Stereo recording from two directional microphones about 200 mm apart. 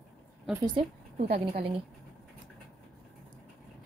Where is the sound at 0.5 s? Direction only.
25° right (ahead or behind).